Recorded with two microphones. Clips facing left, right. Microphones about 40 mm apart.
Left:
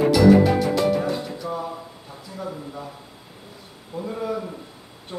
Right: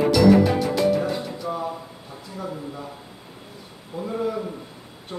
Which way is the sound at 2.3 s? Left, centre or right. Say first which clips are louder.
Even; centre.